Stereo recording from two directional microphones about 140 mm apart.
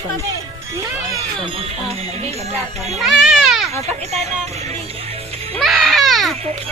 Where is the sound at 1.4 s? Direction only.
45° right (ahead or behind).